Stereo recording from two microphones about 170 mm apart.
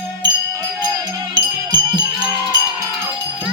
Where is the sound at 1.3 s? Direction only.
25° right (ahead or behind).